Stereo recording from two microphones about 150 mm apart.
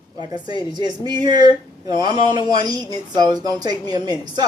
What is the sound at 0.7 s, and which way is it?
A woman's voice, 25° right (ahead or behind).